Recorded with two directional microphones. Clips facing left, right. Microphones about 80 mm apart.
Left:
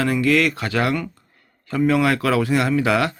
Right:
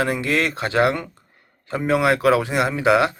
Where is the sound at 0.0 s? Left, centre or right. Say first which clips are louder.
Left 3 dB; right.